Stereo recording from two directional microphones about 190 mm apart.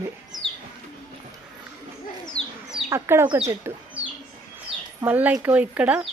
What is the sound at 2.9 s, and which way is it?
Speech, 15° right (ahead or behind).